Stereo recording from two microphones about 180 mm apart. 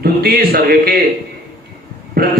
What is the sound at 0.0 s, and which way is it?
A man's voice, 55° right (ahead or behind).